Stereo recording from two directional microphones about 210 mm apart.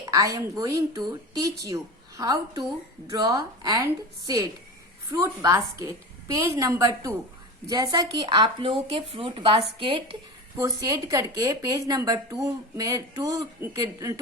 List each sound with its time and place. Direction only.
0.0 s speech: 15° right (ahead or behind)
5.1 s speech: 15° right (ahead or behind)